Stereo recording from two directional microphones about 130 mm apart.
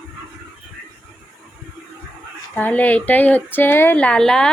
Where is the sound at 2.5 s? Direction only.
10° left (ahead or behind).